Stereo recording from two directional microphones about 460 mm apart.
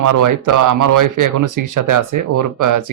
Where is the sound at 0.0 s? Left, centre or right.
Right.